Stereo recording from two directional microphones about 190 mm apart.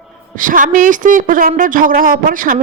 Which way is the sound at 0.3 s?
45° right (ahead or behind).